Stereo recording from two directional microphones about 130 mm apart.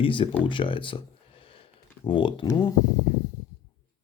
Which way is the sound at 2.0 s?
40° left (ahead or behind).